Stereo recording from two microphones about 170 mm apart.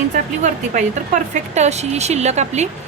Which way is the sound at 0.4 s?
45° right (ahead or behind).